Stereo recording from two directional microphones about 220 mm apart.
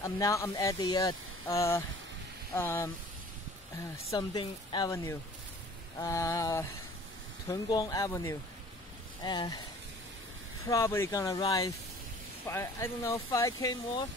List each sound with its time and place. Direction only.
0.0 s speech: 15° left (ahead or behind)
4.1 s speech: 20° left (ahead or behind)
10.7 s speech: 10° left (ahead or behind)